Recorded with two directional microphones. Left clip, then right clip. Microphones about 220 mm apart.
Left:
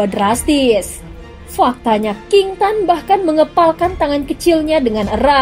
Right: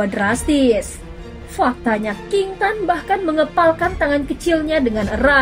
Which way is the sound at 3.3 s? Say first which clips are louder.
Left 2 dB; 25° left (ahead or behind).